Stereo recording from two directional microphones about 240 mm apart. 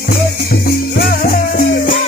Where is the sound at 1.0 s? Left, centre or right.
Left.